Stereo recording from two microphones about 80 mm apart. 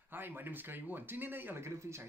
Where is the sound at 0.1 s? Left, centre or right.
Right.